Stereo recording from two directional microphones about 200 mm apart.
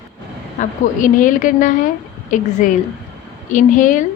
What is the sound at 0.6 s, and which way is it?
A woman's voice, 40° left (ahead or behind).